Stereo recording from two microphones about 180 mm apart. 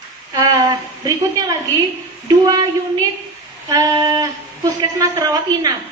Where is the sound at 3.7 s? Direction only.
20° right (ahead or behind).